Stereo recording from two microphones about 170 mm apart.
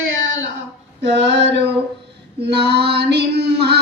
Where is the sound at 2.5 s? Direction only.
75° right (ahead or behind).